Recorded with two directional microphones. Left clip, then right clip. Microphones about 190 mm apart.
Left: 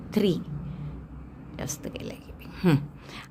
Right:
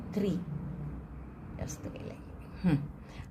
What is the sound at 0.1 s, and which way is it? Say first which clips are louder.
Speech: left 9 dB; 40° left (ahead or behind).